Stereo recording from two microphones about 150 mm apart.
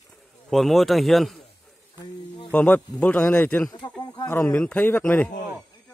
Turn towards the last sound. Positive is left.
turn(degrees=10)  # may be behind; listen again after turning